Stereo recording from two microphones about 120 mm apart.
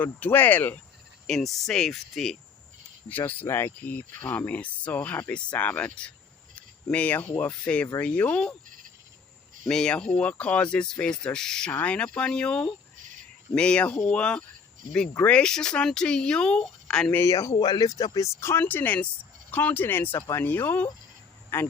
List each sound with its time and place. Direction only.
0.0 s speech: 15° left (ahead or behind)
1.3 s speech: centre (ahead or behind)
3.1 s speech: 15° left (ahead or behind)
9.6 s speech: 5° left (ahead or behind)
17.2 s speech: 25° left (ahead or behind)
17.5 s speech: 35° left (ahead or behind); by 21.7 s 15° left (ahead or behind)